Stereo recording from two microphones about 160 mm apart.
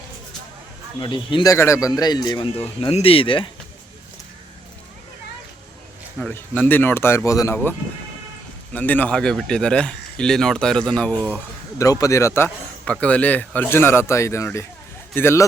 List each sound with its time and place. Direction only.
0.9 s speech: 30° left (ahead or behind)
1.5 s a man's voice: 15° left (ahead or behind); by 3.5 s 30° left (ahead or behind)
6.3 s a man's voice: 10° left (ahead or behind)
11.8 s a man's voice: 20° left (ahead or behind)